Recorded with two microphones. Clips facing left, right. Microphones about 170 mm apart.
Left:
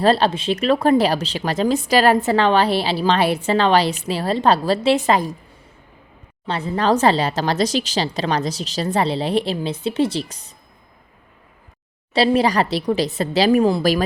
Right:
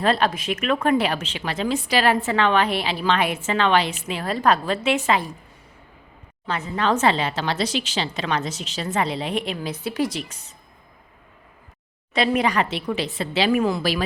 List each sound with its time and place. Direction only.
0.0 s speech: 30° left (ahead or behind)
6.5 s speech: 35° left (ahead or behind)
12.1 s speech: 30° left (ahead or behind)